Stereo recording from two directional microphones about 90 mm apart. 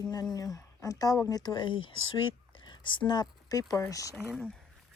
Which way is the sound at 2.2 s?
65° left (ahead or behind).